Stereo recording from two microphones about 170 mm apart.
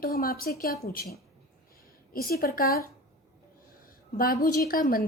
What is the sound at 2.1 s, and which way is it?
Speech, 60° left (ahead or behind).